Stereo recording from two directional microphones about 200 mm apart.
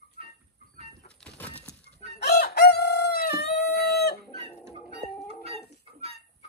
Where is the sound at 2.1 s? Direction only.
55° left (ahead or behind).